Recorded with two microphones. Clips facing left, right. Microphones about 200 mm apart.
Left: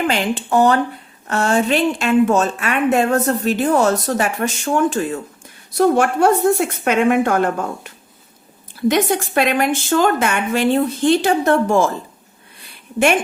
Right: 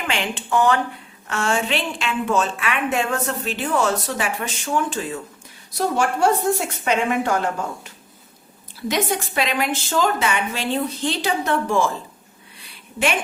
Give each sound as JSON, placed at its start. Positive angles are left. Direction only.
{"t": 0.1, "sound": "a woman's voice", "side_deg": 40}